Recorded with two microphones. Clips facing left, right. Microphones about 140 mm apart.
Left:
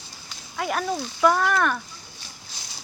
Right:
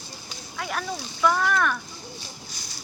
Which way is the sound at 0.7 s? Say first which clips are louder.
Left 5 dB; 25° left (ahead or behind).